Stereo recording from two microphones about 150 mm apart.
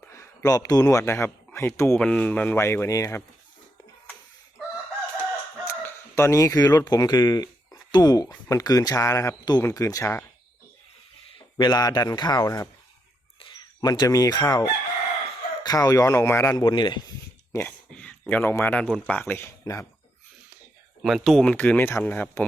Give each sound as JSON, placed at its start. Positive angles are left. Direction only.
{"t": 0.1, "sound": "speech", "side_deg": 20}
{"t": 5.6, "sound": "speech", "side_deg": 15}
{"t": 11.3, "sound": "speech", "side_deg": 30}
{"t": 17.5, "sound": "speech", "side_deg": 15}
{"t": 21.0, "sound": "speech", "side_deg": 0}
{"t": 21.5, "sound": "speech", "side_deg": 15}